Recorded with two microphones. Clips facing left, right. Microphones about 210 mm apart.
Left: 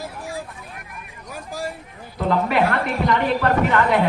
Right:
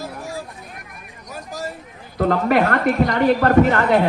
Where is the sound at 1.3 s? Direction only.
10° left (ahead or behind).